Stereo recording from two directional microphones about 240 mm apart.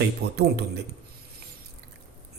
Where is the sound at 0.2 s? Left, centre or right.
Right.